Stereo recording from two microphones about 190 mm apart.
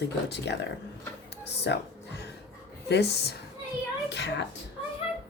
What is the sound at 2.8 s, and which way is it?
A woman's voice, 60° left (ahead or behind).